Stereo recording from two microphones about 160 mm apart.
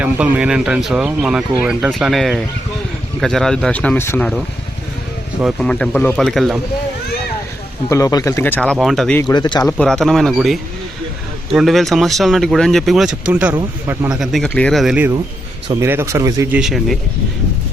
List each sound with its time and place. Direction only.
0.0 s speech: 10° right (ahead or behind); by 4.3 s 15° left (ahead or behind)
5.4 s speech: centre (ahead or behind)
7.9 s speech: 20° left (ahead or behind)
8.8 s speech: centre (ahead or behind)
9.2 s speech: 25° left (ahead or behind)
9.6 s speech: 5° left (ahead or behind); by 16.6 s 20° right (ahead or behind)
16.6 s speech: centre (ahead or behind)